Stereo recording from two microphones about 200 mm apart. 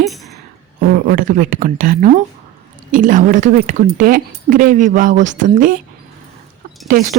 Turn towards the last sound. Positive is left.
turn(degrees=-45)  # may be behind; listen again after turning